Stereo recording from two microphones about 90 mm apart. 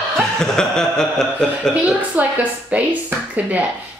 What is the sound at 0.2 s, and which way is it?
Chuckle, 5° left (ahead or behind).